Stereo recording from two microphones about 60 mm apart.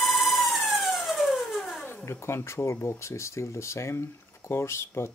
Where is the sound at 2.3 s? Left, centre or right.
Left.